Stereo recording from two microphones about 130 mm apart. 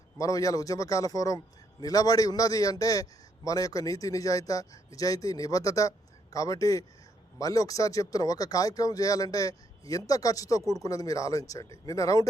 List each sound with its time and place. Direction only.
0.2 s a man's voice: 25° left (ahead or behind)